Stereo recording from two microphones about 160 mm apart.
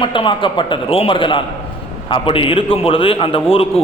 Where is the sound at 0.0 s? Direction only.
30° left (ahead or behind).